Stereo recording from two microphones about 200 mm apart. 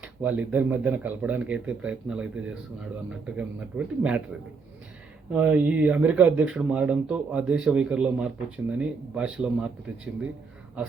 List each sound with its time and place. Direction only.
0.0 s speech: 5° right (ahead or behind)
5.3 s speech: 5° right (ahead or behind)